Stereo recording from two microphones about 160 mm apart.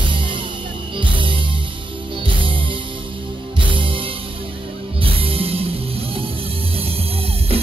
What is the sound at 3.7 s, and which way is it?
Music, 30° right (ahead or behind).